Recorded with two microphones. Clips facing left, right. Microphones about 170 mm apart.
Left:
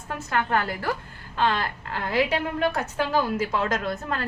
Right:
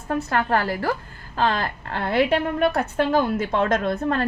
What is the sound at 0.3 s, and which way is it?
A woman's voice, 35° right (ahead or behind).